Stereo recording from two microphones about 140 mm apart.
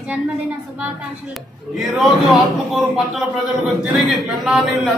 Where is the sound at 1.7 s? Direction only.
Centre (ahead or behind).